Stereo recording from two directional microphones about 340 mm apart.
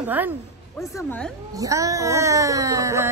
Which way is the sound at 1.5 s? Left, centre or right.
Centre.